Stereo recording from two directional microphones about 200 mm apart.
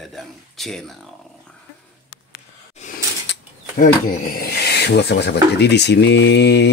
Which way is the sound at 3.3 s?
60° left (ahead or behind).